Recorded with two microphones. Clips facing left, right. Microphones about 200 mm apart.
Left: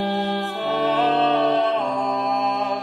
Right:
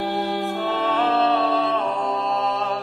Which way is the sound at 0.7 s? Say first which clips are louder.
Left 3 dB; 15° left (ahead or behind).